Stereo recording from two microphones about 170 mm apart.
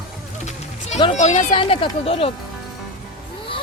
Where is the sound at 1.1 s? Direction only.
40° left (ahead or behind).